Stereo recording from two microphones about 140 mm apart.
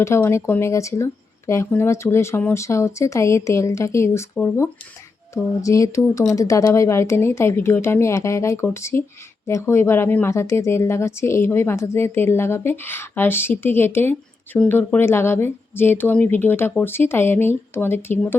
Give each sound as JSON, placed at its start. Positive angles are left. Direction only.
{"t": 0.0, "sound": "speech", "side_deg": 20}